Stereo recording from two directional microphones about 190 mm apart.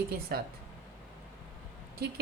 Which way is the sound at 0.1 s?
55° right (ahead or behind).